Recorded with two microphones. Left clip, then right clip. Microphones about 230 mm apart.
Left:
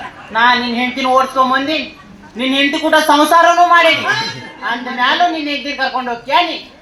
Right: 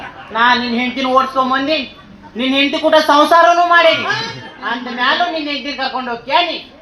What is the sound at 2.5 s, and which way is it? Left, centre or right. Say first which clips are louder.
Speech: even; right.